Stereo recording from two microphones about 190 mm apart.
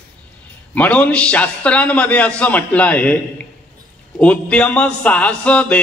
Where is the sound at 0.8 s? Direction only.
5° left (ahead or behind).